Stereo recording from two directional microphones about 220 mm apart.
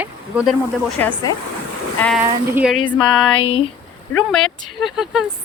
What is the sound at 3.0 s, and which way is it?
Music, 25° left (ahead or behind).